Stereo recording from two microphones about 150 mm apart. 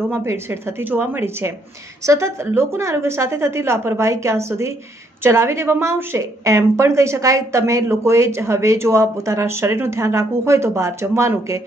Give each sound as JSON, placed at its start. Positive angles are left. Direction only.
{"t": 0.1, "sound": "a woman's voice", "side_deg": -15}